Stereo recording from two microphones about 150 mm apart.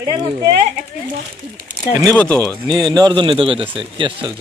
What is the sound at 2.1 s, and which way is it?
Speech, 10° left (ahead or behind).